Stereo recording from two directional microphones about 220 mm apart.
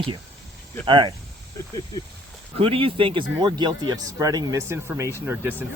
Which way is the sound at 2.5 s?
25° right (ahead or behind).